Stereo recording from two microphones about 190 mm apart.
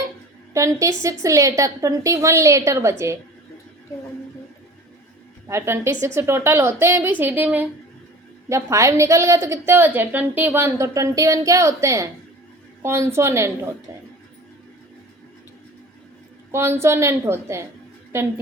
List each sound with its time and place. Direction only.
0.5 s a woman's voice: 15° right (ahead or behind)
5.5 s a woman's voice: 15° right (ahead or behind)
16.5 s a woman's voice: 15° right (ahead or behind)